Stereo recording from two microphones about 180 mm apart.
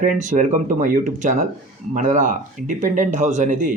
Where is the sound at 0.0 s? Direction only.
45° right (ahead or behind).